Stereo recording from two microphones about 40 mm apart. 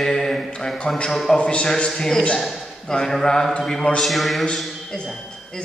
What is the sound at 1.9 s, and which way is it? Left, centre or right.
A man's voice, centre.